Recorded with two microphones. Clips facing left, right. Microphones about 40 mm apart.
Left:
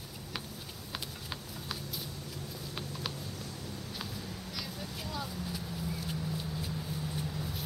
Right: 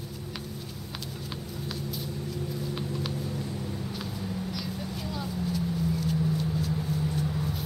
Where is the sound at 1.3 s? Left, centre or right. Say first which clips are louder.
Right 5 dB; centre.